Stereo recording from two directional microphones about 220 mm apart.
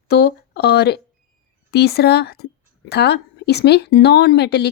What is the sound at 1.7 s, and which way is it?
Speech, 45° left (ahead or behind).